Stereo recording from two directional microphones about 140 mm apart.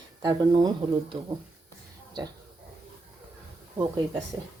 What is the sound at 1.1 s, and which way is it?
Speech, 40° right (ahead or behind).